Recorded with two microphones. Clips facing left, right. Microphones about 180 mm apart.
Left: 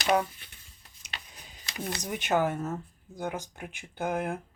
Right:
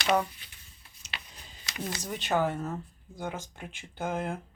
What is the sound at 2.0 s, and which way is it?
Speech, 20° left (ahead or behind).